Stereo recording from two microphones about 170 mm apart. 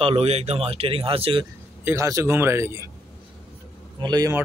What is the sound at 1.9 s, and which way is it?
Speech, 15° right (ahead or behind).